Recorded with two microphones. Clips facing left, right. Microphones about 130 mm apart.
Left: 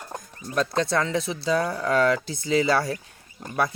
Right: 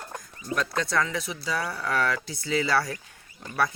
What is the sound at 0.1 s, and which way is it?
Speech, 25° left (ahead or behind).